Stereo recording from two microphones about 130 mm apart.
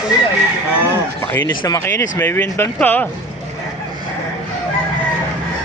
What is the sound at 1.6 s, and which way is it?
Speech, 25° left (ahead or behind).